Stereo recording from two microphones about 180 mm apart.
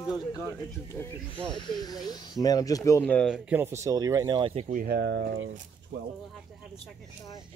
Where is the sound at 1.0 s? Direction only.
10° left (ahead or behind).